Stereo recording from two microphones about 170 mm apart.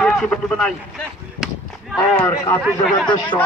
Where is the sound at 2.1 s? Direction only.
5° left (ahead or behind).